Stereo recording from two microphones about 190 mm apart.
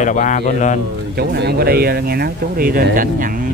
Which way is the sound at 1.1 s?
60° right (ahead or behind).